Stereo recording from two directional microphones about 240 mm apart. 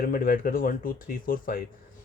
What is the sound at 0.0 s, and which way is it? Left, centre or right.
Speech, left.